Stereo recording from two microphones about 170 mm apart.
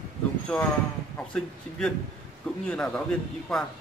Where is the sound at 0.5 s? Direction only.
5° left (ahead or behind).